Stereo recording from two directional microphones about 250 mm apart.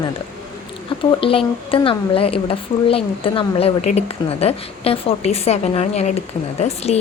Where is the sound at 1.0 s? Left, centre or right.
Left.